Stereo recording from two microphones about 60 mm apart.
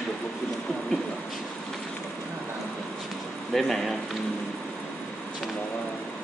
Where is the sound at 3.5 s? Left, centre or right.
Centre.